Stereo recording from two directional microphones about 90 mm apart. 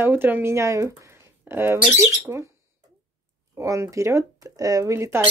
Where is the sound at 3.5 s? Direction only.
35° right (ahead or behind).